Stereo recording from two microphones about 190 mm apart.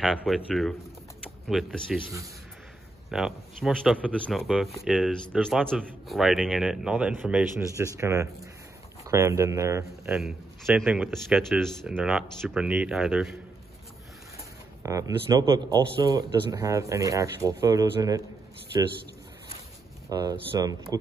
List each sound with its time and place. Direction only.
0.0 s speech: 5° right (ahead or behind)
3.1 s speech: 5° right (ahead or behind)
10.1 s speech: centre (ahead or behind)
14.8 s a man's voice: 15° right (ahead or behind)
20.1 s speech: 20° right (ahead or behind)